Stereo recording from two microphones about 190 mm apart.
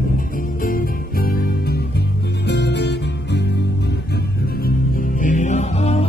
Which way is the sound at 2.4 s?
65° left (ahead or behind).